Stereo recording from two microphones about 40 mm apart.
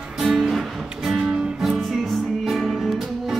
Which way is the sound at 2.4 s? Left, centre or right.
Centre.